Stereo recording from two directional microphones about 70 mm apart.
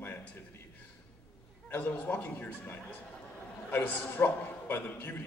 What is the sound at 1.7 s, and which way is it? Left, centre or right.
A man's voice, left.